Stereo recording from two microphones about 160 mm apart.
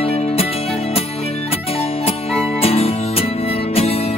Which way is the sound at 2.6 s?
40° left (ahead or behind).